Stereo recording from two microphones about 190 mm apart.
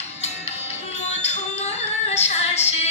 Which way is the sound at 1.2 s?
35° left (ahead or behind).